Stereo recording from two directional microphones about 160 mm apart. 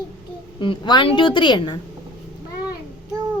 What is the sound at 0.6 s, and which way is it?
A woman's voice, 30° left (ahead or behind).